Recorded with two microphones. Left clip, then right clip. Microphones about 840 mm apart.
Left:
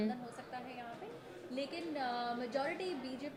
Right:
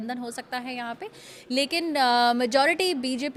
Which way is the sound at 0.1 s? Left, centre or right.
Right.